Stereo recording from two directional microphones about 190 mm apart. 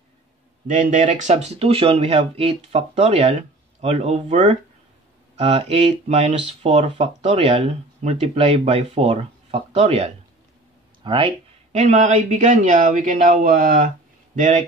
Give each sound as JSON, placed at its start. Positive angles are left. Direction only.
{"t": 0.7, "sound": "speech", "side_deg": -40}